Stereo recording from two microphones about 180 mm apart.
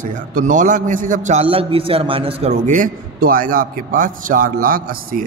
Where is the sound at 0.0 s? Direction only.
45° right (ahead or behind).